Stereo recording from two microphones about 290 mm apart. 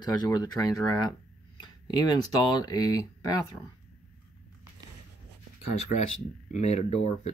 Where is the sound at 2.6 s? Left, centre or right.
Centre.